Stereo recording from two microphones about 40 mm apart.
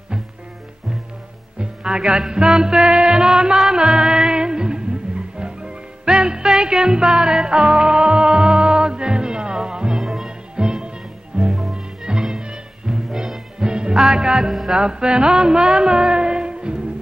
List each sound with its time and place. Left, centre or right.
1.8 s music: centre
10.5 s music: right
11.4 s music: centre
11.7 s music: centre
12.9 s music: centre
13.6 s music: right
14.4 s music: centre
14.7 s music: centre